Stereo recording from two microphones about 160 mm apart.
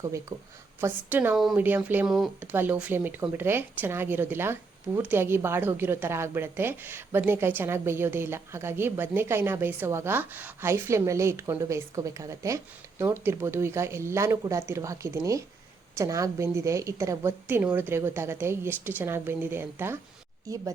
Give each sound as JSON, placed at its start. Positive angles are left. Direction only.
{"t": 0.8, "sound": "a woman's voice", "side_deg": -15}